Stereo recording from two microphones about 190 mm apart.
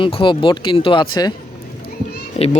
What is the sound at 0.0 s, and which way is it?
Speech, 25° left (ahead or behind).